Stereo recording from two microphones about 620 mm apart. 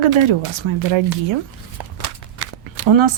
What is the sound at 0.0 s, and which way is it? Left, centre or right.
Speech, right.